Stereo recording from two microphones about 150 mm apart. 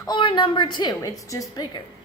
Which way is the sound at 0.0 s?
35° left (ahead or behind).